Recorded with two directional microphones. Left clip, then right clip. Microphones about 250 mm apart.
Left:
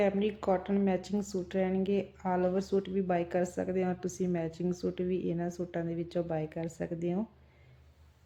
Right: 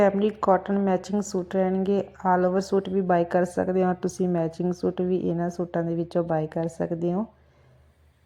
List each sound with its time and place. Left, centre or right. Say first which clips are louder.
0.0 s speech: right 8 dB; right
2.1 s speech: right 11 dB; centre
2.4 s speech: right 7 dB; right